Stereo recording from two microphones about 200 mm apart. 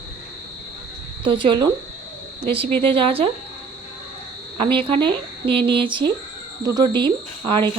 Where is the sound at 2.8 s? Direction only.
25° right (ahead or behind).